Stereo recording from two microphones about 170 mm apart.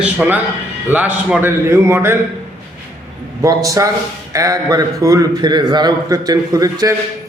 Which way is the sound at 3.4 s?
20° right (ahead or behind).